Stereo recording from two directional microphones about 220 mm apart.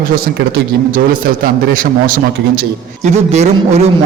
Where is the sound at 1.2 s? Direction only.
40° right (ahead or behind).